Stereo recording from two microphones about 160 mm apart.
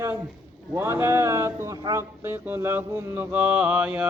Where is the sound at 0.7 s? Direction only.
15° right (ahead or behind).